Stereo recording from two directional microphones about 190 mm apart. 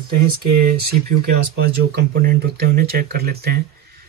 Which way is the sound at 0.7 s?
55° right (ahead or behind).